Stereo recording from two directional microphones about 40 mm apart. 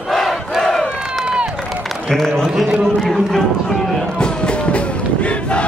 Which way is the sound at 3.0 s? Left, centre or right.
Centre.